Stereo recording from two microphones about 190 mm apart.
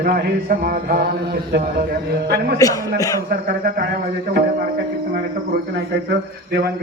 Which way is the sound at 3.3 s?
55° right (ahead or behind).